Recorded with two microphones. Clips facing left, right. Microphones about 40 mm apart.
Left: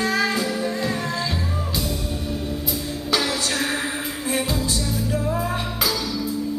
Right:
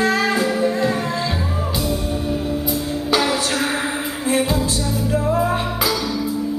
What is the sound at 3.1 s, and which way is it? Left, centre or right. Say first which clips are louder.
Music: right 4 dB; centre.